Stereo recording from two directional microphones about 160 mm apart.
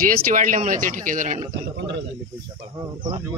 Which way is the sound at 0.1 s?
55° right (ahead or behind).